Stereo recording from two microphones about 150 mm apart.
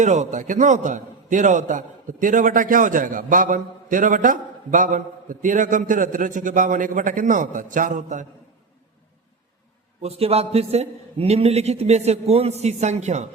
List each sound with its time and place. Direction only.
0.0 s a man's voice: 50° right (ahead or behind)
10.0 s a man's voice: 45° right (ahead or behind)